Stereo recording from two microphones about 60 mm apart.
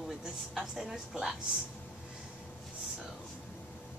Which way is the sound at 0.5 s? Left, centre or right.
Centre.